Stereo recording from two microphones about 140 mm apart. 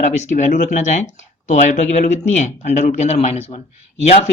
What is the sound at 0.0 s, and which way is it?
Speech, 55° left (ahead or behind).